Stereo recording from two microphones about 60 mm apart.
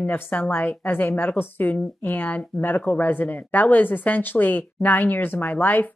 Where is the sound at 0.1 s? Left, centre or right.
Left.